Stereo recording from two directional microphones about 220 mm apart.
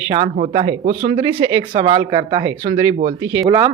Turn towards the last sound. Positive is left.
turn(degrees=-15)  # may be behind; listen again after turning